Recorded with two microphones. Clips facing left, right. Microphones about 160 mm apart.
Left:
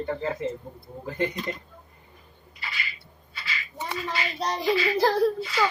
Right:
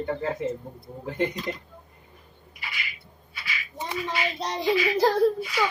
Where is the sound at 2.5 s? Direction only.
15° right (ahead or behind).